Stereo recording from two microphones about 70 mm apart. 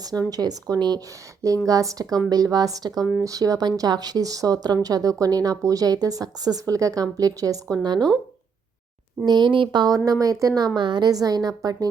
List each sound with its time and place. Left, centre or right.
0.0 s speech: right
1.6 s speech: right
7.8 s speech: right
9.2 s speech: right
10.1 s speech: right
10.8 s speech: right